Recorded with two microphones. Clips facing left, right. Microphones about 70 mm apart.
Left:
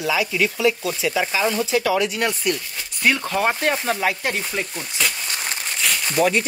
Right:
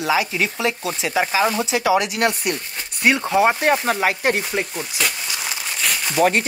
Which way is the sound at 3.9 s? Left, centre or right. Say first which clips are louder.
Right 3 dB; right.